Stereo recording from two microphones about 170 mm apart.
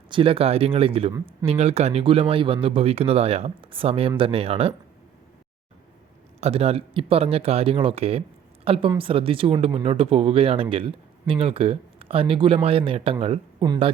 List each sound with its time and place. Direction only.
0.1 s speech: 30° right (ahead or behind)
6.4 s speech: 35° right (ahead or behind)